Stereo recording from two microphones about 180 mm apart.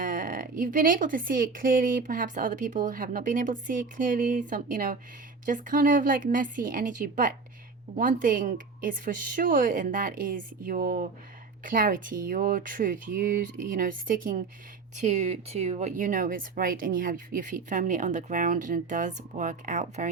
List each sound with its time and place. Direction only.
0.0 s speech: 50° right (ahead or behind)